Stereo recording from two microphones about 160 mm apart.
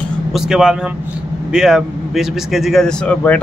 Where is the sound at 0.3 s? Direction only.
5° right (ahead or behind).